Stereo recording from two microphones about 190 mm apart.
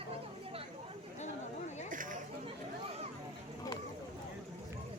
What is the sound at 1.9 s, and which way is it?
Chatter, 45° right (ahead or behind).